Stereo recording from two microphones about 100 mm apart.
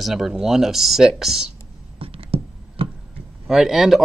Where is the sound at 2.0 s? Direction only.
65° right (ahead or behind).